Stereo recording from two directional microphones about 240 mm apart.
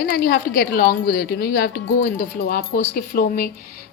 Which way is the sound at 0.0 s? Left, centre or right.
Left.